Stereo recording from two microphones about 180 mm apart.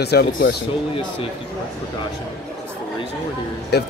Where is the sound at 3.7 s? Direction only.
65° left (ahead or behind).